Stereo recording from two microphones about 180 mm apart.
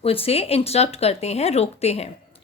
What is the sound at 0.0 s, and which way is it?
A woman's voice, 30° left (ahead or behind).